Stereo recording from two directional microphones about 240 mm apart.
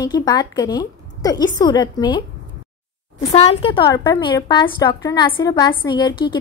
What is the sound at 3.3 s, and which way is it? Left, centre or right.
A woman's voice, left.